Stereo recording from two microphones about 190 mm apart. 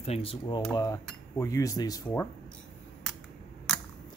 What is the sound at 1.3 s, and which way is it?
Speech, 15° left (ahead or behind).